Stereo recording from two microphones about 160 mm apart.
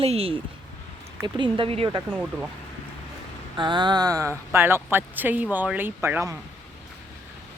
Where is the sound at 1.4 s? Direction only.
35° right (ahead or behind).